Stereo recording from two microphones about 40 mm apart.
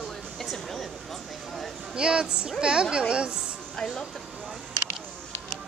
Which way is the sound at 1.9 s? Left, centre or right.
Right.